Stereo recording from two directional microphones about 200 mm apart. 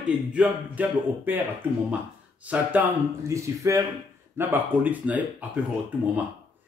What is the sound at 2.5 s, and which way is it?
A man's voice, 5° right (ahead or behind).